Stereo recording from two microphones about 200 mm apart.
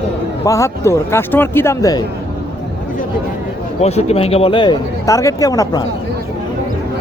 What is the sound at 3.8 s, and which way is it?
Speech, 30° left (ahead or behind).